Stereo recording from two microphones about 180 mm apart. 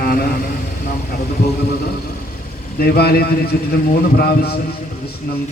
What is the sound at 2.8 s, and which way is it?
A man's voice, 60° left (ahead or behind).